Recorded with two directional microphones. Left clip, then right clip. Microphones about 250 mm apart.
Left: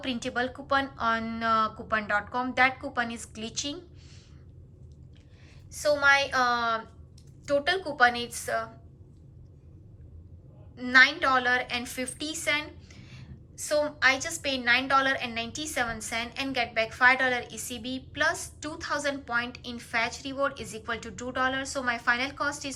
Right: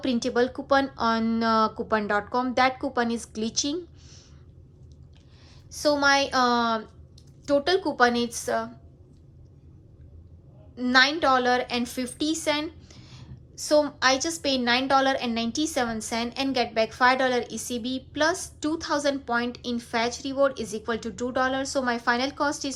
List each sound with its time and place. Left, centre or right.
0.0 s a woman's voice: centre
5.7 s a woman's voice: right
10.8 s a woman's voice: centre